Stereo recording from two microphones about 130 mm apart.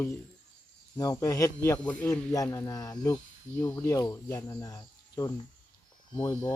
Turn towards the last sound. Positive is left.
turn(degrees=30)  # may be behind; listen again after turning